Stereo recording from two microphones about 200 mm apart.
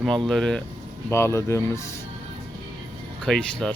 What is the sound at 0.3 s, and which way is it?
Speech, 5° left (ahead or behind).